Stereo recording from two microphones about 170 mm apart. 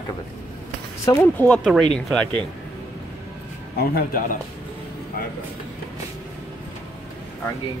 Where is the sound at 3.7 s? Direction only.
60° left (ahead or behind).